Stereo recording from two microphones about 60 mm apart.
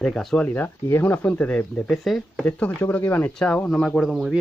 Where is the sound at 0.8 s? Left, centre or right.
Left.